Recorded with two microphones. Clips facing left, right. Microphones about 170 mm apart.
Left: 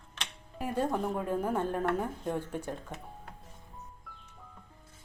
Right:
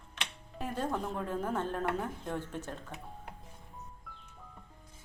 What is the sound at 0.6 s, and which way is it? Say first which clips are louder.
A woman's voice: left 4 dB; 10° left (ahead or behind).